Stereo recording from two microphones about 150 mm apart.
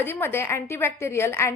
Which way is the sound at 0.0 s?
15° left (ahead or behind).